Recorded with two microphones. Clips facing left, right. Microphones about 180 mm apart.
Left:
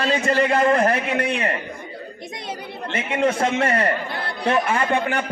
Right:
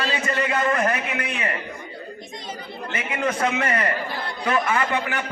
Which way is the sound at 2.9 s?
30° left (ahead or behind).